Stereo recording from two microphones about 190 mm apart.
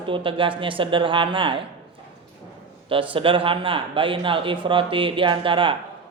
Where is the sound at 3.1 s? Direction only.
30° right (ahead or behind).